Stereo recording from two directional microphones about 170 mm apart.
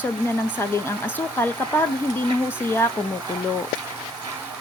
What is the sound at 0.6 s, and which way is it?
A woman's voice, 15° left (ahead or behind).